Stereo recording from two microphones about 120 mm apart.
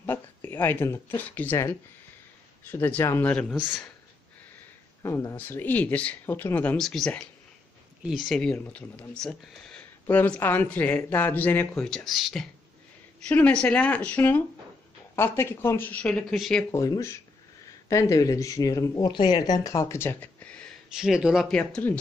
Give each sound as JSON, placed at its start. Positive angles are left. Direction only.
{"t": 0.0, "sound": "speech", "side_deg": 20}
{"t": 5.0, "sound": "speech", "side_deg": 25}
{"t": 6.8, "sound": "speech", "side_deg": 5}
{"t": 9.2, "sound": "speech", "side_deg": 5}
{"t": 11.9, "sound": "speech", "side_deg": 0}
{"t": 13.3, "sound": "speech", "side_deg": 10}
{"t": 16.7, "sound": "speech", "side_deg": 25}
{"t": 20.9, "sound": "speech", "side_deg": -5}
{"t": 21.5, "sound": "speech", "side_deg": 10}